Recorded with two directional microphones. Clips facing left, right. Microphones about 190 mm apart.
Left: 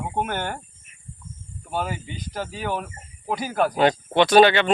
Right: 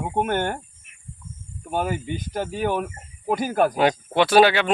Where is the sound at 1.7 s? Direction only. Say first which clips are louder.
Right 3 dB; 50° right (ahead or behind).